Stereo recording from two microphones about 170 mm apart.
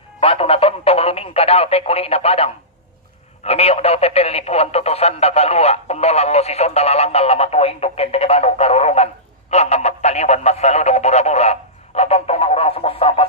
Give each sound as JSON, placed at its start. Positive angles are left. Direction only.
{"t": 0.2, "sound": "speech", "side_deg": 35}